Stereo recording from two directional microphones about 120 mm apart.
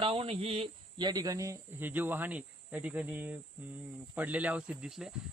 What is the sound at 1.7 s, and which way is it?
Speech, 15° right (ahead or behind).